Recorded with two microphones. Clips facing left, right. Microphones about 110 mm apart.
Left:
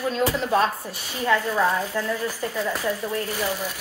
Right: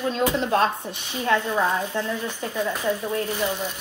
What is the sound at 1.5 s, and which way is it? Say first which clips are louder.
A woman's voice: left 1 dB; 20° right (ahead or behind).